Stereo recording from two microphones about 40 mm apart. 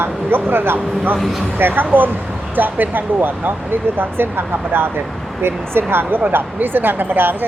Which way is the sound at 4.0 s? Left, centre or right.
Right.